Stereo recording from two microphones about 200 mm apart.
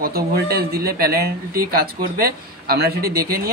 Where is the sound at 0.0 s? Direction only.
50° right (ahead or behind).